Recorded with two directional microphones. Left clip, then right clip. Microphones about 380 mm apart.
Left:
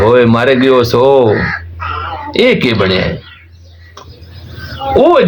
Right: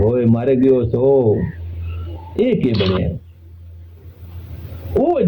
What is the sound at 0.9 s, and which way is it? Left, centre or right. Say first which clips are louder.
Speech: left 7 dB; left.